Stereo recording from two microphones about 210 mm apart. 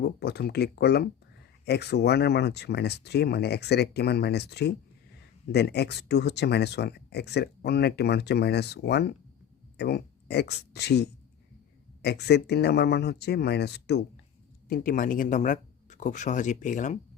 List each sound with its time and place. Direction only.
0.0 s speech: 50° left (ahead or behind)
14.7 s speech: 40° left (ahead or behind)